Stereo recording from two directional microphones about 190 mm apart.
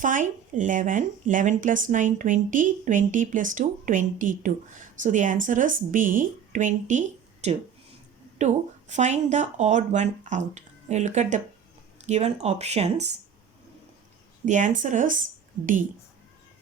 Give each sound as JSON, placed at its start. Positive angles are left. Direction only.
{"t": 0.0, "sound": "speech", "side_deg": -45}
{"t": 14.4, "sound": "speech", "side_deg": -40}